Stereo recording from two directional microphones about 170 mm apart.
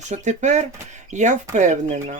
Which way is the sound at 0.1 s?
45° right (ahead or behind).